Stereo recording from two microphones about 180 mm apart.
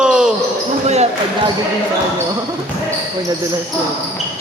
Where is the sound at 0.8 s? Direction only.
40° right (ahead or behind).